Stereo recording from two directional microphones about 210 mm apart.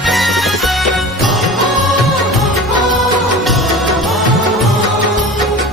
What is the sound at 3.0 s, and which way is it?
Music, centre (ahead or behind).